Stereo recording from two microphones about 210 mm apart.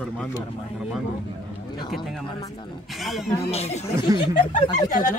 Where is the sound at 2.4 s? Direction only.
30° left (ahead or behind).